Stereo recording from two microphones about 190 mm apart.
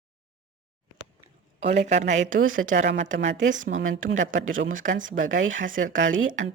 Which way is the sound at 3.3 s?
75° right (ahead or behind).